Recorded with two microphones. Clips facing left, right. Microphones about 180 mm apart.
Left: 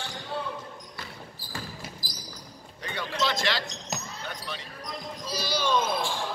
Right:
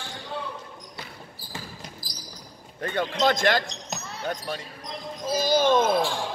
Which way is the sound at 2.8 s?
50° right (ahead or behind).